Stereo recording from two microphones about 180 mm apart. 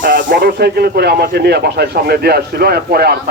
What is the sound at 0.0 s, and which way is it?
Speech, 50° right (ahead or behind).